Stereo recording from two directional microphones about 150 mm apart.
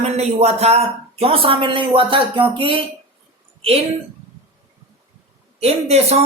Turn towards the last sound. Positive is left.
turn(degrees=-45)  # may be behind; listen again after turning